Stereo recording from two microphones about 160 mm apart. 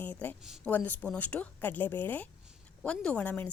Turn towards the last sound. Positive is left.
turn(degrees=10)  # may be behind; listen again after turning